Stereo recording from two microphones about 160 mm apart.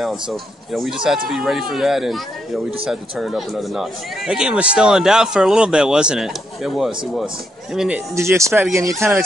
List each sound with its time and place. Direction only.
0.0 s speech: centre (ahead or behind)
8.1 s speech: 20° right (ahead or behind)